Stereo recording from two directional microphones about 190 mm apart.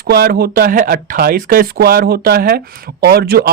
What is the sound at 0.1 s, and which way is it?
A woman's voice, 55° right (ahead or behind).